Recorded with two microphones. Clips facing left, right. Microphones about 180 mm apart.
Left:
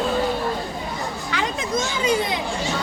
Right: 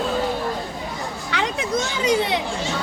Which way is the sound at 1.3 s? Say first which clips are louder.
Right 2 dB; 70° right (ahead or behind).